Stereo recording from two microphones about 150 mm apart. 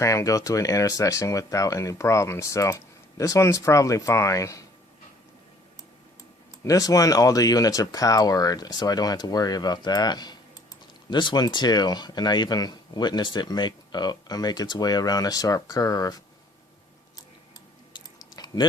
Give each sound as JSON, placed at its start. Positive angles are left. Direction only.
{"t": 0.0, "sound": "speech", "side_deg": 20}
{"t": 6.7, "sound": "speech", "side_deg": 25}
{"t": 17.9, "sound": "chewing", "side_deg": 25}